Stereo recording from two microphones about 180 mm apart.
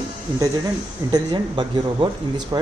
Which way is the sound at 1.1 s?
25° right (ahead or behind).